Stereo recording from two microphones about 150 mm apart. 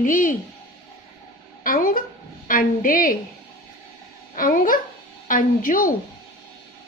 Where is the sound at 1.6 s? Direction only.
70° left (ahead or behind).